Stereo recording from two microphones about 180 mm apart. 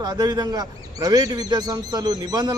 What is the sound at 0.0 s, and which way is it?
Speech, 20° right (ahead or behind).